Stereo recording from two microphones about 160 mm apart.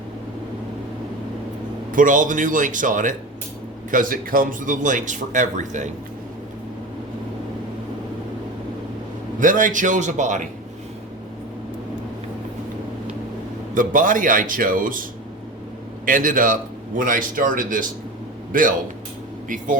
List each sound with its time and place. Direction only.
1.9 s a man's voice: 55° right (ahead or behind)
9.4 s speech: 55° right (ahead or behind)
13.7 s a man's voice: 55° right (ahead or behind)
16.0 s a man's voice: 55° right (ahead or behind)